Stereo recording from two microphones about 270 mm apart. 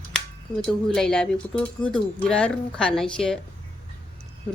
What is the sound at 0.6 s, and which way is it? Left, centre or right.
Speech, centre.